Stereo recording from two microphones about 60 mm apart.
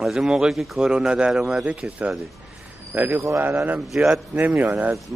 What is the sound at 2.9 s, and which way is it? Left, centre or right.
Speech, right.